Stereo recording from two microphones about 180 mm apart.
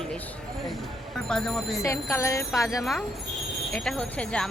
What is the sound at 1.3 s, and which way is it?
Speech, 5° left (ahead or behind).